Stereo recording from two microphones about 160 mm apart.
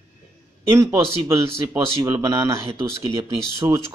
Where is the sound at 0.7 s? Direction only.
20° right (ahead or behind).